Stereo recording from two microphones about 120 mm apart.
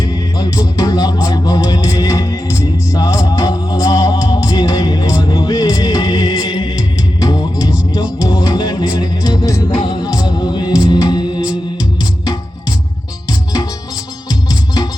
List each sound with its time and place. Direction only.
0.0 s music: 35° left (ahead or behind)